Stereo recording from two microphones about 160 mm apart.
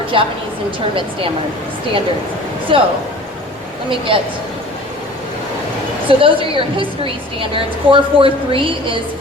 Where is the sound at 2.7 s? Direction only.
35° right (ahead or behind).